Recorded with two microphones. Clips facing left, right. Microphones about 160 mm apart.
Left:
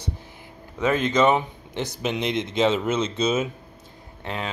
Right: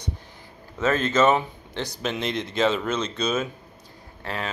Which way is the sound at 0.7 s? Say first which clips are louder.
Even; 15° left (ahead or behind).